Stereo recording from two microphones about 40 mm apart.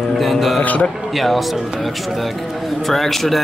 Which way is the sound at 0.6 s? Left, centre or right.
Left.